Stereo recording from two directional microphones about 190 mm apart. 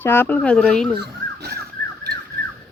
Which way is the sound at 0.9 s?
60° right (ahead or behind).